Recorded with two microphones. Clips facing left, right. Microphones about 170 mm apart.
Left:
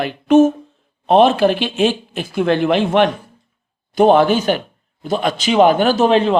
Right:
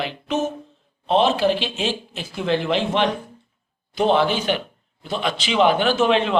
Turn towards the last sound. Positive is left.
turn(degrees=40)  # may be behind; listen again after turning